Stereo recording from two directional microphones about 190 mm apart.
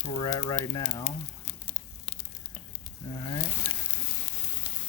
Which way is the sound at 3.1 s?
25° left (ahead or behind).